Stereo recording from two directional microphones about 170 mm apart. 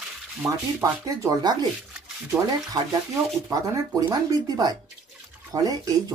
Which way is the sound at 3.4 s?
20° right (ahead or behind).